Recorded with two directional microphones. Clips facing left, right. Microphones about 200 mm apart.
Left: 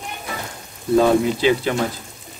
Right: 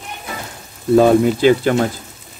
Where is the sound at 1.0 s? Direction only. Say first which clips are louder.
Right 4 dB; 50° right (ahead or behind).